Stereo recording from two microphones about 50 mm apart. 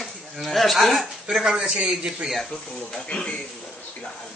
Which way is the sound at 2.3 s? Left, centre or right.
Centre.